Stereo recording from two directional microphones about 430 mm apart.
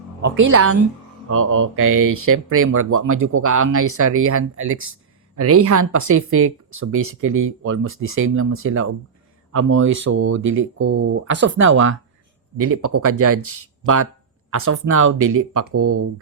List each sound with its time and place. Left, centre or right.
0.3 s speech: right